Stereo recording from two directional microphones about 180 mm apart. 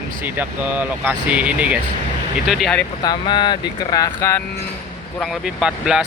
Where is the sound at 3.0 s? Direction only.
25° left (ahead or behind).